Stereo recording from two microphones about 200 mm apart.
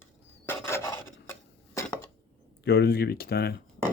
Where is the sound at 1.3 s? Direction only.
15° left (ahead or behind).